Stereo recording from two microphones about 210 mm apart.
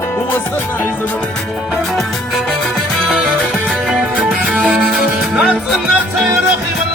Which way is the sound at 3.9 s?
Centre (ahead or behind).